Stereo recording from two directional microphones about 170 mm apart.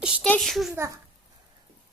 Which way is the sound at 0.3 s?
Centre (ahead or behind).